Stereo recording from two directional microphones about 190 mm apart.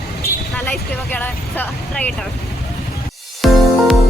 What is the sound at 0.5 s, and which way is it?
Speech, 10° left (ahead or behind).